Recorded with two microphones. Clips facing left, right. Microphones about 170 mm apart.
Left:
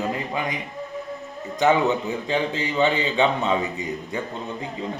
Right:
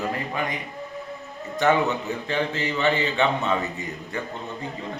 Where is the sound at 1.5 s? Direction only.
15° left (ahead or behind).